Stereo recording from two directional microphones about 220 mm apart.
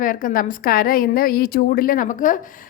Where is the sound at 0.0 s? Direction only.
35° left (ahead or behind).